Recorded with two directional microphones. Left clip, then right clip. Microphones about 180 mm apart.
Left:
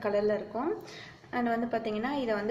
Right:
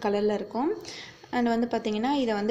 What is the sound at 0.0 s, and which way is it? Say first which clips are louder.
A woman's voice: right 2 dB; 40° right (ahead or behind).